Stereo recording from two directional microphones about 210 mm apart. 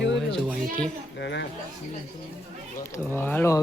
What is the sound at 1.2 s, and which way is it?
Speech, 55° left (ahead or behind).